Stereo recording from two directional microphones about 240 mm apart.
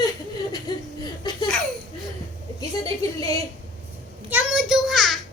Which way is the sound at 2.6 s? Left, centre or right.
Centre.